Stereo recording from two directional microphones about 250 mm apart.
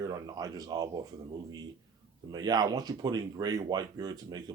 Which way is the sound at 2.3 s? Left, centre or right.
Centre.